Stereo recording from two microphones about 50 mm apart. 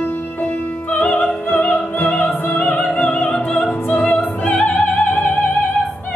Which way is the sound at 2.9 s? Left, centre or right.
Left.